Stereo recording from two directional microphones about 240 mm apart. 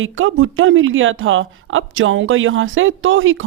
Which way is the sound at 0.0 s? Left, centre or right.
Right.